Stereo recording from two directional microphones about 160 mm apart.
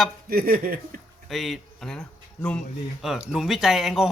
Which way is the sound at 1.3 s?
Centre (ahead or behind).